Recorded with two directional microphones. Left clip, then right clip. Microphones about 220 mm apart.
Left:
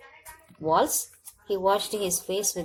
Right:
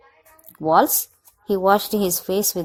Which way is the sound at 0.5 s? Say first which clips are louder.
Right 7 dB; 35° right (ahead or behind).